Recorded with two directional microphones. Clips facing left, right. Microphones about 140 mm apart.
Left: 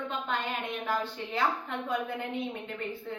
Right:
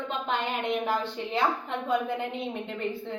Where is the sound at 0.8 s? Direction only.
25° right (ahead or behind).